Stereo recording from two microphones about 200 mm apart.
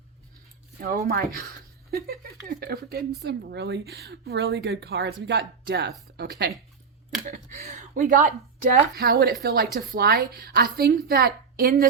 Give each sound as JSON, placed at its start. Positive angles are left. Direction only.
{"t": 0.8, "sound": "speech", "side_deg": -45}
{"t": 7.3, "sound": "speech", "side_deg": -35}
{"t": 8.7, "sound": "speech", "side_deg": -50}